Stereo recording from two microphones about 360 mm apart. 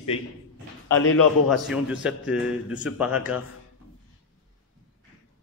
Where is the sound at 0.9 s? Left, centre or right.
Left.